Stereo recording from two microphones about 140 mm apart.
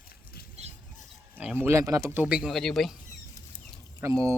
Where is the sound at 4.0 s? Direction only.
20° right (ahead or behind).